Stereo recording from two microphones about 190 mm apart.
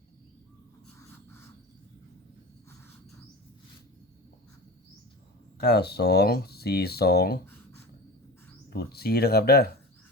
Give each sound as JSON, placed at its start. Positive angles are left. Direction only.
{"t": 5.5, "sound": "speech", "side_deg": 60}
{"t": 8.7, "sound": "speech", "side_deg": 55}